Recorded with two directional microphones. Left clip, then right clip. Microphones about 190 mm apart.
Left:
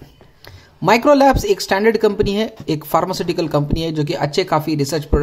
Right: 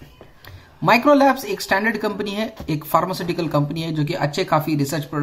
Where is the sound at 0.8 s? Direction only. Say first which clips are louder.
Left 3 dB; 50° left (ahead or behind).